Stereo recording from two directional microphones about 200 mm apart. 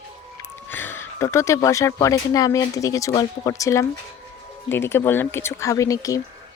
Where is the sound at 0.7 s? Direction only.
10° left (ahead or behind).